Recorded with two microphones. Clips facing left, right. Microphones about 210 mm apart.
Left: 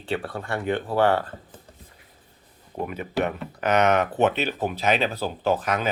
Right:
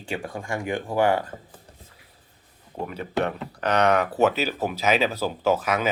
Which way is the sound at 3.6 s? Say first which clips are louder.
Left 1 dB; centre (ahead or behind).